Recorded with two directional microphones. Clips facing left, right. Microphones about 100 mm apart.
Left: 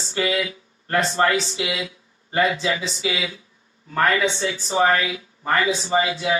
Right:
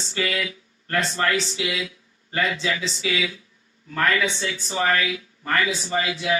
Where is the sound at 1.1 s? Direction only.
15° left (ahead or behind).